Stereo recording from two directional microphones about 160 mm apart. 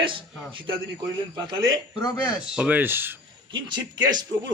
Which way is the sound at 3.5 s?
30° right (ahead or behind).